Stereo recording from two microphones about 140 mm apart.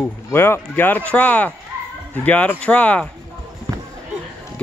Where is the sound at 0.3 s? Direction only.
15° left (ahead or behind).